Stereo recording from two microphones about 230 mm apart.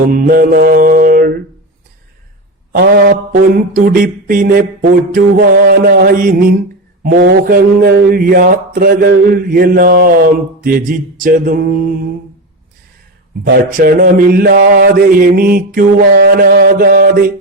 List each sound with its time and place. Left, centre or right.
0.0 s mantra: right
2.7 s mantra: right
13.4 s mantra: right